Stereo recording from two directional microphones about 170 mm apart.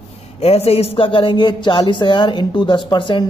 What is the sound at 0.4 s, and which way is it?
Speech, 35° left (ahead or behind).